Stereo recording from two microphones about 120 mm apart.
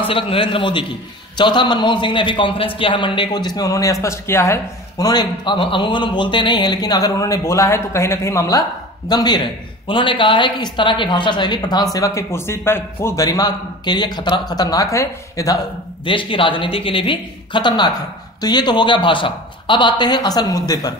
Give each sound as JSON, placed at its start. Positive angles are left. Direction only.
{"t": 0.0, "sound": "a man's voice", "side_deg": 50}
{"t": 16.1, "sound": "a man's voice", "side_deg": 45}